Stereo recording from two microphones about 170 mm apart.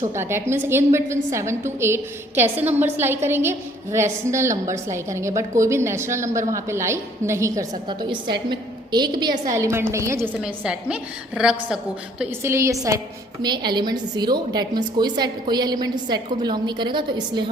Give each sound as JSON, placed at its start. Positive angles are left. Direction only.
{"t": 0.1, "sound": "a woman's voice", "side_deg": -15}